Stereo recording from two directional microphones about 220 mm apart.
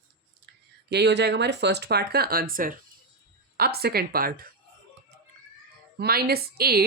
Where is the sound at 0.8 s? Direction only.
50° right (ahead or behind).